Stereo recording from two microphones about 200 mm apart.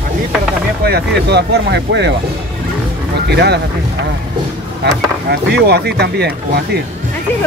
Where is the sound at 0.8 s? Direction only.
55° right (ahead or behind).